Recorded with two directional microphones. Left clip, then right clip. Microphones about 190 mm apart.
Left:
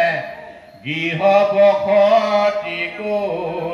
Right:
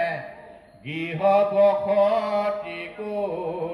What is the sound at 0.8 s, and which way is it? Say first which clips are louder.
Mantra: left 6 dB; 50° right (ahead or behind).